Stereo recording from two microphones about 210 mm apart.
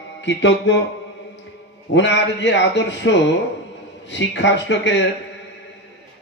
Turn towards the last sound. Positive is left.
turn(degrees=55)  # may be behind; listen again after turning